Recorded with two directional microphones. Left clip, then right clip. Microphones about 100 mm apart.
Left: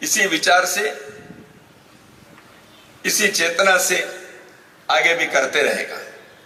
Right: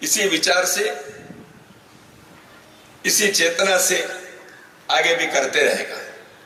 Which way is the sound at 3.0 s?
15° left (ahead or behind).